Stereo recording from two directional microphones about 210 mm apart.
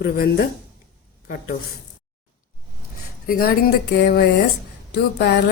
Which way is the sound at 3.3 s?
45° left (ahead or behind).